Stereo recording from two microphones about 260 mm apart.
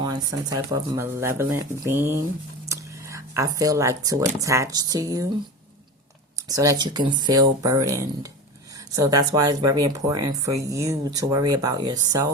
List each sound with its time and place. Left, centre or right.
0.0 s speech: centre
2.6 s a sound: centre
4.4 s speech: centre
6.3 s speech: centre